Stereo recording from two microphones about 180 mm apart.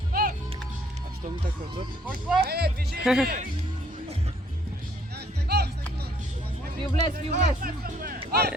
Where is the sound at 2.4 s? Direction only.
65° right (ahead or behind).